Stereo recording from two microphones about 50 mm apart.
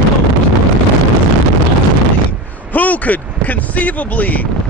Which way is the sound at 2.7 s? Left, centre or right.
Left.